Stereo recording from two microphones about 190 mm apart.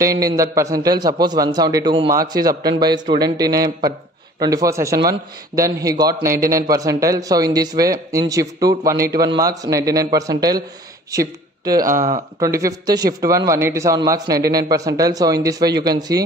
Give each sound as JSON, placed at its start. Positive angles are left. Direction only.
{"t": 0.0, "sound": "a man's voice", "side_deg": -15}
{"t": 6.2, "sound": "speech", "side_deg": -50}
{"t": 6.5, "sound": "speech", "side_deg": -15}
{"t": 11.9, "sound": "speech", "side_deg": -40}
{"t": 12.4, "sound": "a man's voice", "side_deg": -15}